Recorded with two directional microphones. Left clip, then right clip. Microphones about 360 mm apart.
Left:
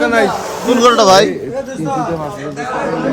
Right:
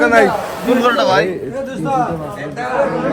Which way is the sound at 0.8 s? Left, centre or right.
Centre.